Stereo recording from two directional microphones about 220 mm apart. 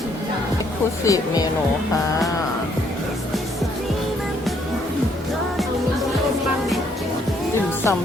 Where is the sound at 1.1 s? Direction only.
15° left (ahead or behind).